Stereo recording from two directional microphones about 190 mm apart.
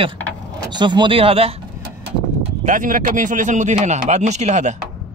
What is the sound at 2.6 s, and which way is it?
Speech, 45° right (ahead or behind).